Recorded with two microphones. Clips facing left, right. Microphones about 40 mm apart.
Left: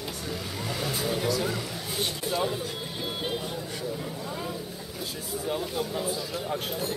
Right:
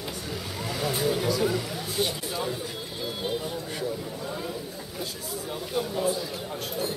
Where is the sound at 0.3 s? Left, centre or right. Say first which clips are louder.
Even; centre.